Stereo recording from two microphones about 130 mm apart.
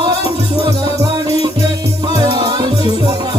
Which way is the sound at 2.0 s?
30° right (ahead or behind).